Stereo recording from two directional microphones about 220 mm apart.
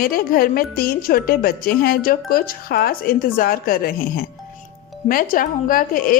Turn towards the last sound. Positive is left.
turn(degrees=40)  # may be behind; listen again after turning